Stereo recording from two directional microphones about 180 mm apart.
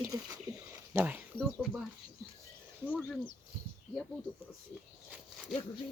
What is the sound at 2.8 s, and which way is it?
Speech, 5° left (ahead or behind).